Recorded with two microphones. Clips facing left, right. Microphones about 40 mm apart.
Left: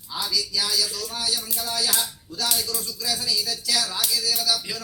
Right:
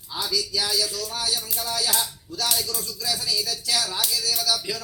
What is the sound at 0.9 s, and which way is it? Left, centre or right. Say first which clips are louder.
Speech: right 1 dB; left.